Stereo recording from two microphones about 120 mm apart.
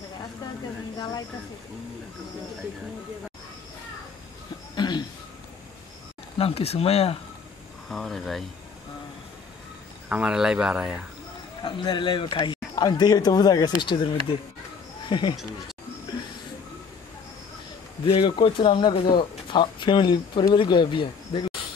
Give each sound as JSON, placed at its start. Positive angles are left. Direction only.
{"t": 0.9, "sound": "speech", "side_deg": 35}
{"t": 4.7, "sound": "a sound", "side_deg": 35}
{"t": 6.3, "sound": "speech", "side_deg": 55}
{"t": 7.9, "sound": "speech", "side_deg": 5}
{"t": 10.0, "sound": "speech", "side_deg": -10}
{"t": 11.6, "sound": "speech", "side_deg": 40}
{"t": 18.0, "sound": "speech", "side_deg": 45}